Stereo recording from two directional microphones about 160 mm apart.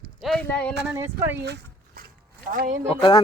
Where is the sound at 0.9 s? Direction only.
15° right (ahead or behind).